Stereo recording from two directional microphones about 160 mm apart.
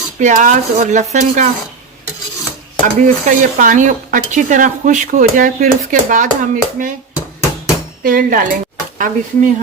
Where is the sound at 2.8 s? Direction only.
55° right (ahead or behind).